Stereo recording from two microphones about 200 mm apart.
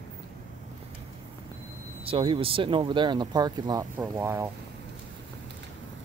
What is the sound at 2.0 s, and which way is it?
Speech, 25° right (ahead or behind).